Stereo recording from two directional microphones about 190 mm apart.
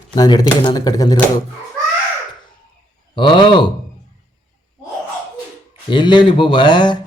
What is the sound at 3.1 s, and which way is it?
Speech, 25° left (ahead or behind).